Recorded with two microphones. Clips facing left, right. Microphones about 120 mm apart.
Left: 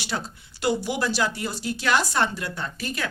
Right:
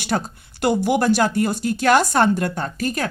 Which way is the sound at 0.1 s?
50° right (ahead or behind).